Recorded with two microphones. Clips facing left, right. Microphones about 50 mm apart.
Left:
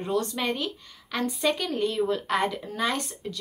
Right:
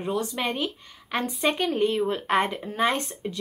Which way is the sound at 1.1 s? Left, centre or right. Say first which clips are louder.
Right 1 dB; right.